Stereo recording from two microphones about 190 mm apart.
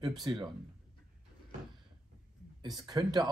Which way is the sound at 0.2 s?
20° right (ahead or behind).